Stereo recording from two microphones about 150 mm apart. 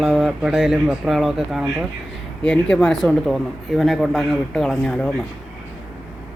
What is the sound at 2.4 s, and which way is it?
Speech, 5° left (ahead or behind).